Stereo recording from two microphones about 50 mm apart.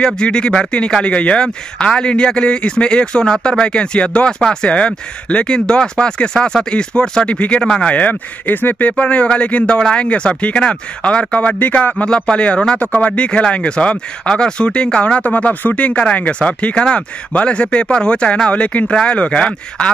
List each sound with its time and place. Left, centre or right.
0.0 s speech: centre
7.6 s speech: centre
7.9 s speech: left
8.9 s speech: left